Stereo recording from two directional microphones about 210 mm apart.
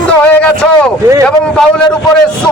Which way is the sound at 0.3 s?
5° left (ahead or behind).